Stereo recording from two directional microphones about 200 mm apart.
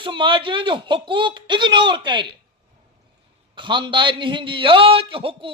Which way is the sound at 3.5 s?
25° right (ahead or behind).